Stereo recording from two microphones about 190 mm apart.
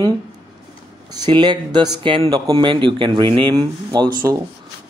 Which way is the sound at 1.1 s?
25° right (ahead or behind).